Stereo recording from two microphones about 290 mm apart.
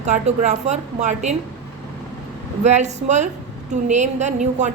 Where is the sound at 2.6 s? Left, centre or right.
Right.